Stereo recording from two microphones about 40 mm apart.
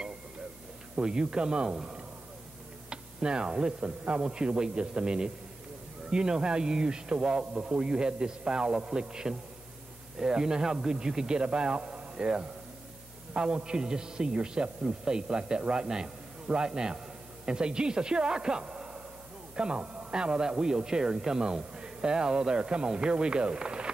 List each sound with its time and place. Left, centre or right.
0.9 s speech: right